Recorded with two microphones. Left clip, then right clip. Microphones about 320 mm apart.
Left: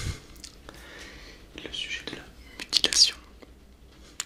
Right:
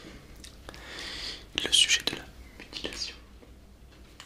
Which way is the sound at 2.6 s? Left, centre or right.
Left.